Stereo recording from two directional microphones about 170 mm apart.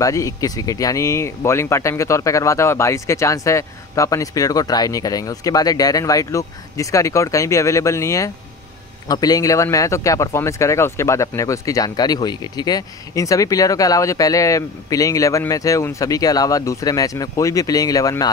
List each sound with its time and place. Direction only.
0.0 s speech: 20° left (ahead or behind)